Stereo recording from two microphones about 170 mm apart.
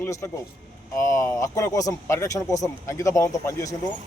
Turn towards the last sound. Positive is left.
turn(degrees=20)  # may be behind; listen again after turning